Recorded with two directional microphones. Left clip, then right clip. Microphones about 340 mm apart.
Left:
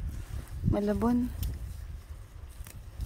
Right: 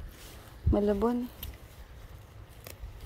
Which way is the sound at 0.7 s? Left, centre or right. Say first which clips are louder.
Right 3 dB; centre.